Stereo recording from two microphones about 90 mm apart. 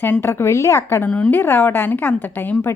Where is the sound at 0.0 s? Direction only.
25° left (ahead or behind).